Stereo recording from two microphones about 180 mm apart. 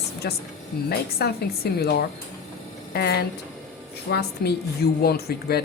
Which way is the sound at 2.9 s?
60° left (ahead or behind).